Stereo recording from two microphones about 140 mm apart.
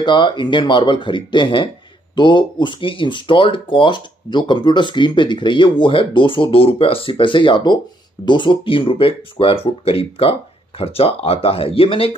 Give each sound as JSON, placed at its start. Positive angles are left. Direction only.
{"t": 0.0, "sound": "speech", "side_deg": 35}